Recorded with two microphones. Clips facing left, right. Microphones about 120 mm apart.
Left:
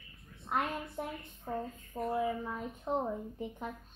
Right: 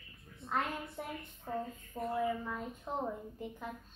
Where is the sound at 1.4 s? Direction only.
15° left (ahead or behind).